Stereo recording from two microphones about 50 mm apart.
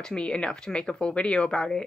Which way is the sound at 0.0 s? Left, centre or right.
Centre.